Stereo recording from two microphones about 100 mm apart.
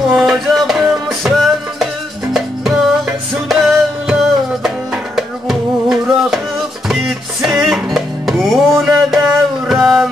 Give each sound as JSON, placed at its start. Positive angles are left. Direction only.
{"t": 0.1, "sound": "music", "side_deg": 0}